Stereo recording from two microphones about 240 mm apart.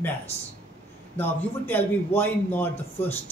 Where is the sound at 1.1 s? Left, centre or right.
Centre.